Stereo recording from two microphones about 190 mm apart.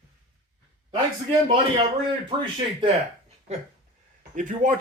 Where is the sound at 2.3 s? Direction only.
25° right (ahead or behind).